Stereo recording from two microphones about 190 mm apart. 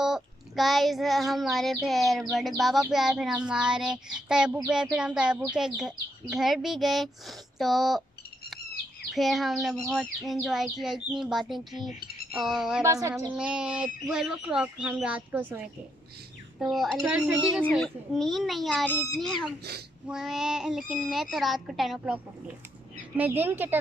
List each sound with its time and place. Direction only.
0.0 s child singing: centre (ahead or behind)
9.1 s child singing: centre (ahead or behind)
12.8 s a woman's voice: 15° right (ahead or behind)
13.3 s child singing: 5° right (ahead or behind)
23.1 s a woman's voice: 10° right (ahead or behind)